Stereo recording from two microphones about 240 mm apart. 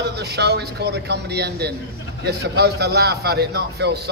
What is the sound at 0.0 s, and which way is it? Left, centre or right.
A man's voice, right.